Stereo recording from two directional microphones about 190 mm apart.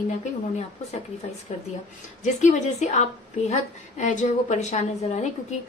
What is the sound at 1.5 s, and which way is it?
A woman's voice, 35° left (ahead or behind).